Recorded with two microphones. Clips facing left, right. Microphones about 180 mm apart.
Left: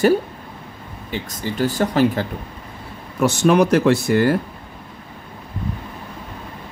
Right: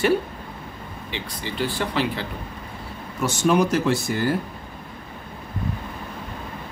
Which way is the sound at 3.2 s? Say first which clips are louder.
Left 5 dB; 65° left (ahead or behind).